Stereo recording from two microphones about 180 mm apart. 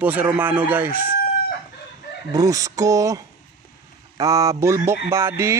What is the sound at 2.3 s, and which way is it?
Speech, 20° right (ahead or behind).